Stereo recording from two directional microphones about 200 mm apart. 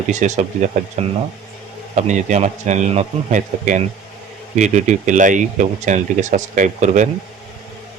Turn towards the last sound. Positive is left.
turn(degrees=-35)  # may be behind; listen again after turning